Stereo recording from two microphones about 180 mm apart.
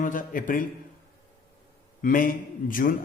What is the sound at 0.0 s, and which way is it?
Speech, 45° left (ahead or behind).